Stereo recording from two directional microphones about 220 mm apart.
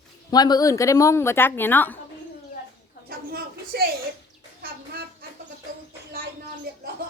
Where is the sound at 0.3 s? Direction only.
20° left (ahead or behind).